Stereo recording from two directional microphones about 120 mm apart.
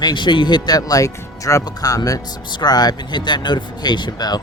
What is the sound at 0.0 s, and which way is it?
Speech, 40° left (ahead or behind).